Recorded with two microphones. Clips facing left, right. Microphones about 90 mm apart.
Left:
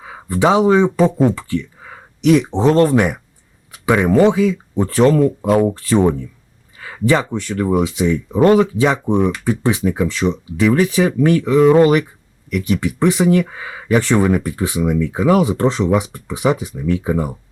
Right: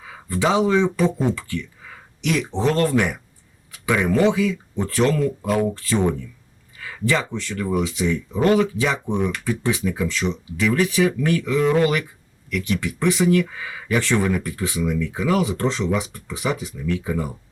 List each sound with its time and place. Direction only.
0.0 s speech: 30° left (ahead or behind)